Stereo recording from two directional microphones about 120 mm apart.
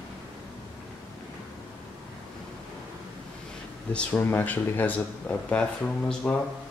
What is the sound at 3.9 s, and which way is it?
Speech, 10° left (ahead or behind).